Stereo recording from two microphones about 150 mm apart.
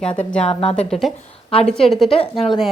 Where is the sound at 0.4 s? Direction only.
40° left (ahead or behind).